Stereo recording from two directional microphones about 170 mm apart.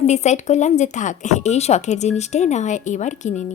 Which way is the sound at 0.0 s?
40° left (ahead or behind).